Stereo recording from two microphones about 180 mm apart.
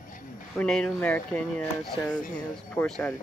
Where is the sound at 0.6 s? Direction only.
5° left (ahead or behind).